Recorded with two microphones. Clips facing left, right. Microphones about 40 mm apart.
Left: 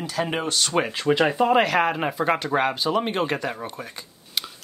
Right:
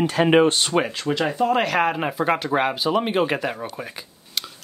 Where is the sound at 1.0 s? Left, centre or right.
Centre.